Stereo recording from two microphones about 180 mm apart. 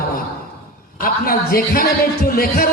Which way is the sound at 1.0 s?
55° left (ahead or behind).